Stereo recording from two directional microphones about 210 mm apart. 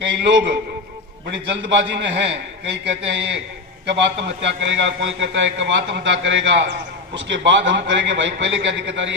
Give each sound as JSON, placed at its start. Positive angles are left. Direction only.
{"t": 0.0, "sound": "a man's voice", "side_deg": -60}